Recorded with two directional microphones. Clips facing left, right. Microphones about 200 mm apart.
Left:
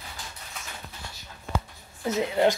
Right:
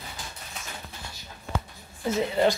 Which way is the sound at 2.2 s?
15° left (ahead or behind).